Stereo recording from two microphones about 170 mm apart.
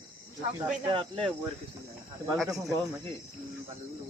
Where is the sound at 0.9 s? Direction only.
30° right (ahead or behind).